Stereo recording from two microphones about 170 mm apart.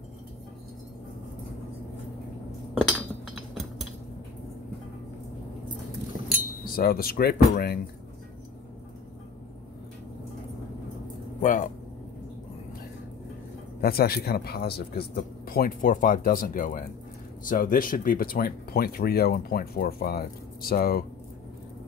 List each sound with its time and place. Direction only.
2.8 s chink: centre (ahead or behind)
6.6 s speech: 60° left (ahead or behind)
11.4 s a sound: 50° left (ahead or behind)
13.7 s speech: 65° left (ahead or behind)